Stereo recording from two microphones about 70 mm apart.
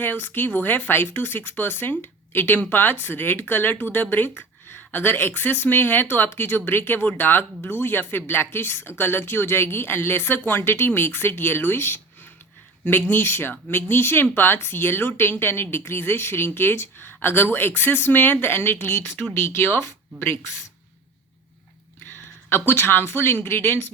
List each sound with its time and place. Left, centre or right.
0.0 s speech: left
22.4 s speech: left